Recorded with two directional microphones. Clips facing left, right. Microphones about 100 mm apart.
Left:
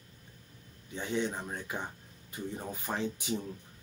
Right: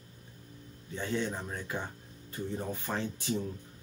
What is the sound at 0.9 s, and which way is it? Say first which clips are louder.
Speech: even; 15° left (ahead or behind).